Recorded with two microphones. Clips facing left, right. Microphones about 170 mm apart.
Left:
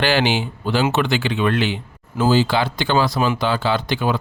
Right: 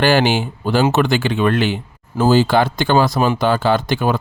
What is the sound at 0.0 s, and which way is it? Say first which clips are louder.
Speech: right 4 dB; 45° right (ahead or behind).